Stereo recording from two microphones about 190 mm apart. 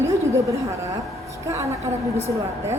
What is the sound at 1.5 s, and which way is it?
Speech, 15° right (ahead or behind).